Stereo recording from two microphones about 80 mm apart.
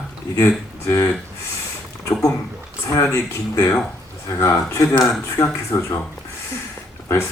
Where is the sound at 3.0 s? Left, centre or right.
Left.